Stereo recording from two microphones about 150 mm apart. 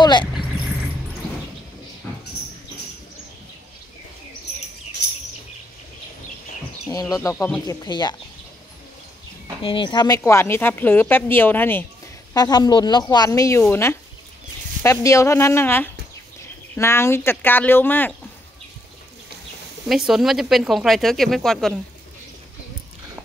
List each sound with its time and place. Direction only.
0.0 s vehicle: 30° left (ahead or behind)
6.9 s speech: 25° left (ahead or behind)
7.6 s a woman's voice: 30° left (ahead or behind)
9.6 s a woman's voice: 35° left (ahead or behind); by 11.8 s 15° left (ahead or behind)
12.4 s a woman's voice: 25° left (ahead or behind)
19.9 s speech: centre (ahead or behind)